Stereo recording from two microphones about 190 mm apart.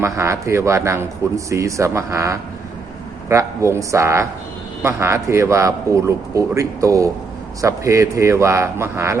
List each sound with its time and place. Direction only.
0.0 s a man's voice: 15° right (ahead or behind)